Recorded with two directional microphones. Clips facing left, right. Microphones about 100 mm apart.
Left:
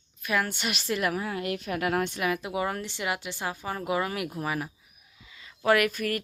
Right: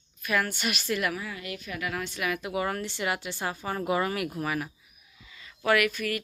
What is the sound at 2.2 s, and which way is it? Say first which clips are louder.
A woman's voice: left 1 dB; 25° left (ahead or behind).